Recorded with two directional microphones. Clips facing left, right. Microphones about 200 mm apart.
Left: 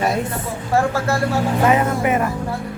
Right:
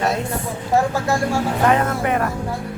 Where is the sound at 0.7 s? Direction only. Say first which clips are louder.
Even; 15° right (ahead or behind).